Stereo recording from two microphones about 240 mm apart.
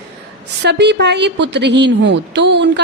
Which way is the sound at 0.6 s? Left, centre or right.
Right.